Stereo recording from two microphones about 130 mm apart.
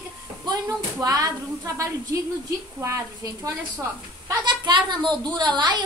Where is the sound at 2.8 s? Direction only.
25° right (ahead or behind).